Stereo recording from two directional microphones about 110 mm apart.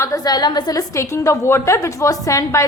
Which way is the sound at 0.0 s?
35° left (ahead or behind).